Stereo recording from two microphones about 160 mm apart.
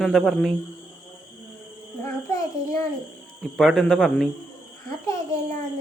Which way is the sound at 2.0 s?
15° left (ahead or behind).